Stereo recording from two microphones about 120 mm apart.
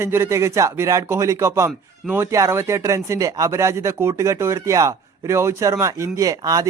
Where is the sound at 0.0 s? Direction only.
20° right (ahead or behind).